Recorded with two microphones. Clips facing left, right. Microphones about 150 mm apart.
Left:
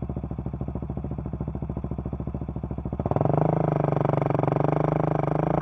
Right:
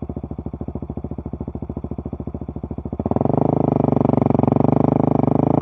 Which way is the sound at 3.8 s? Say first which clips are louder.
Right 8 dB; 30° right (ahead or behind).